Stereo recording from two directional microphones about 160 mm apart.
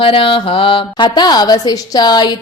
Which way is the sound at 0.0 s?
35° left (ahead or behind).